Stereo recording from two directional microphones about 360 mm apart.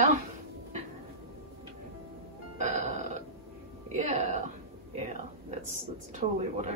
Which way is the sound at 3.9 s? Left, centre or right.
Centre.